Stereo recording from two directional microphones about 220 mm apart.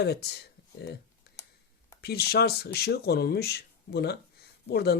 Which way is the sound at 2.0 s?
45° left (ahead or behind).